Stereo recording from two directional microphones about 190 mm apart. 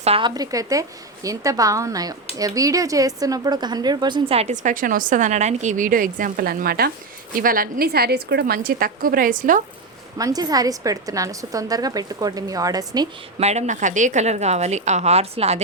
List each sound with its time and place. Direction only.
0.0 s a woman's voice: 30° right (ahead or behind); by 9.6 s 45° right (ahead or behind)
10.2 s a woman's voice: 20° right (ahead or behind)
13.4 s a woman's voice: 35° right (ahead or behind)